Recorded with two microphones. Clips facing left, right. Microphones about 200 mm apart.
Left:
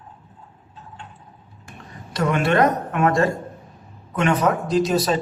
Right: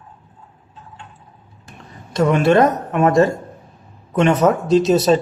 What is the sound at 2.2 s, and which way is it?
Speech, 25° right (ahead or behind).